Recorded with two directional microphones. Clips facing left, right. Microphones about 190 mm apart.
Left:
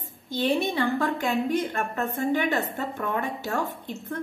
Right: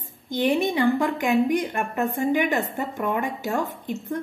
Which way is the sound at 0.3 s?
15° right (ahead or behind).